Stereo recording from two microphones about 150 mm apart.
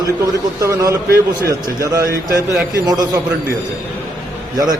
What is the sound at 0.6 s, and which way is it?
A man's voice, 25° right (ahead or behind).